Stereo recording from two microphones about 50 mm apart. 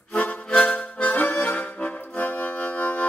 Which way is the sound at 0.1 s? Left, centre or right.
Left.